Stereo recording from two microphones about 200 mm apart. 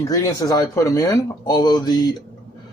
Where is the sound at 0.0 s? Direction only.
15° left (ahead or behind).